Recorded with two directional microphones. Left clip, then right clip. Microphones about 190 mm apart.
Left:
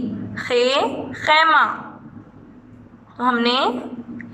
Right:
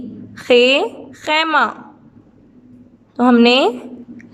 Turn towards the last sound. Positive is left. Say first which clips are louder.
# right 6 dB
turn(degrees=-80)